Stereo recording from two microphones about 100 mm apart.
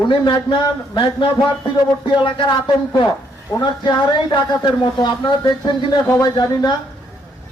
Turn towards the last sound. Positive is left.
turn(degrees=45)  # may be behind; listen again after turning